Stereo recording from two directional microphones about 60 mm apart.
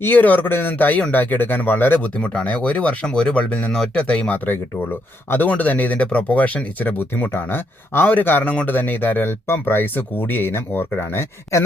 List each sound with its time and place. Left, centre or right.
0.0 s speech: left
2.1 s speech: centre; by 11.6 s left